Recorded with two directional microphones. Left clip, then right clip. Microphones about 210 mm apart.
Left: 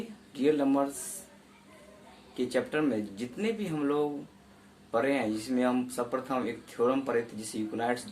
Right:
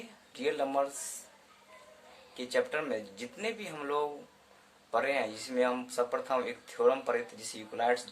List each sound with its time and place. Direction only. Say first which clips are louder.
0.3 s speech: left 4 dB; 25° right (ahead or behind)
2.3 s speech: left 2 dB; 25° right (ahead or behind)